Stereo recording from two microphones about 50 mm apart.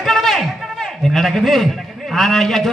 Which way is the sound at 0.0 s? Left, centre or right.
Centre.